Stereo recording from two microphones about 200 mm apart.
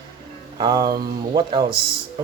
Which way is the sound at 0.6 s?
20° right (ahead or behind).